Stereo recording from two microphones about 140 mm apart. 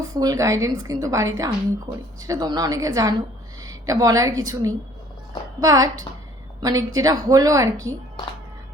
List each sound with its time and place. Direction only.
0.2 s a woman's voice: 25° right (ahead or behind)